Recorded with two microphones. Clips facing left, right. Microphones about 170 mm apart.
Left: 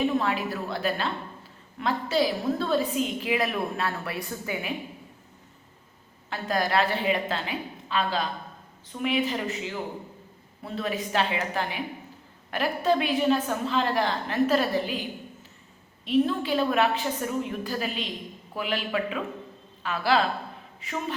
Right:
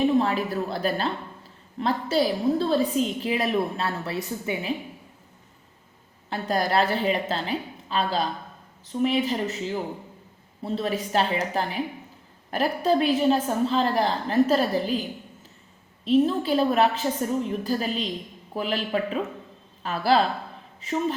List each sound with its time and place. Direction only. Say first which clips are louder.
0.2 s a woman's voice: right 4 dB; 35° right (ahead or behind)
6.3 s a woman's voice: right 2 dB; 35° right (ahead or behind)
16.0 s a woman's voice: right 3 dB; 35° right (ahead or behind)